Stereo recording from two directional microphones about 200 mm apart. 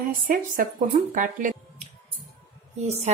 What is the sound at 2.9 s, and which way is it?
Music, 35° right (ahead or behind).